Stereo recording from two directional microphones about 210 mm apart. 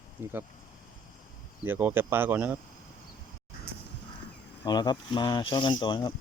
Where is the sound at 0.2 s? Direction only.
10° right (ahead or behind).